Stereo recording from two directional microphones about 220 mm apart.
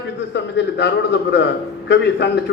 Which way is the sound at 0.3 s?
50° left (ahead or behind).